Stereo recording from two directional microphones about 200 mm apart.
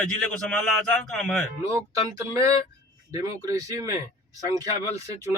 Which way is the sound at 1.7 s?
15° right (ahead or behind).